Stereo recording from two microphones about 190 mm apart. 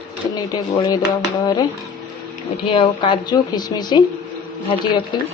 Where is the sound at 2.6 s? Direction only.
25° left (ahead or behind).